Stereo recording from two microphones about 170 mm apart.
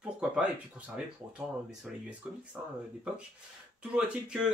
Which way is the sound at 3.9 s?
5° right (ahead or behind).